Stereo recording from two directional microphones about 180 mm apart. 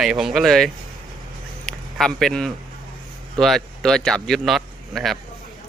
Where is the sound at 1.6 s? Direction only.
Centre (ahead or behind).